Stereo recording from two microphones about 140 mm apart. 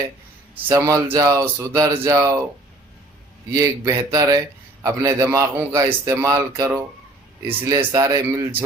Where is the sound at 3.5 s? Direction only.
20° right (ahead or behind).